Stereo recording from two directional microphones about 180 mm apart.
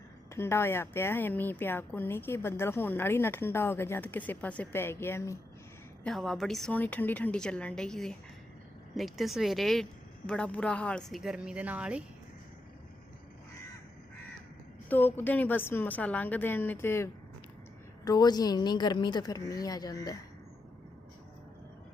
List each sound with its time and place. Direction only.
0.3 s a woman's voice: 15° left (ahead or behind)
6.0 s a woman's voice: centre (ahead or behind)
14.8 s a woman's voice: 10° left (ahead or behind)